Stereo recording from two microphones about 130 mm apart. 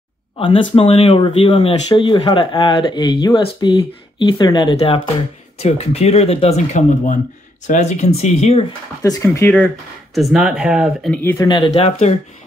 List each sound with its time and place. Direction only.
0.4 s speech: 40° left (ahead or behind)
5.6 s speech: 55° left (ahead or behind)
9.0 s speech: 25° left (ahead or behind)
10.1 s speech: centre (ahead or behind)
11.1 s speech: 15° left (ahead or behind)
11.4 s speech: 35° left (ahead or behind)
11.7 s speech: 55° left (ahead or behind)